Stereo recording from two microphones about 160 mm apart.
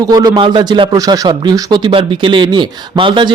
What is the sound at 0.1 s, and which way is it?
Speech, 25° right (ahead or behind).